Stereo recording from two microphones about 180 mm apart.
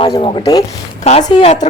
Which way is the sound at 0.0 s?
30° left (ahead or behind).